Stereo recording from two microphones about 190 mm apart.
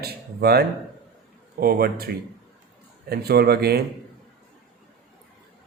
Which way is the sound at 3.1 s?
55° right (ahead or behind).